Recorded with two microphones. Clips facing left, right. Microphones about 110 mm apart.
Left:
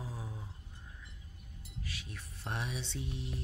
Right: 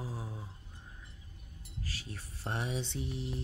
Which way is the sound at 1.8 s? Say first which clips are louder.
Right 3 dB; 35° right (ahead or behind).